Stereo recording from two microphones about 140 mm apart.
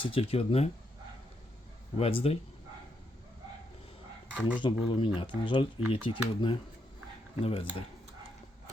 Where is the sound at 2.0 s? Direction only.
45° left (ahead or behind).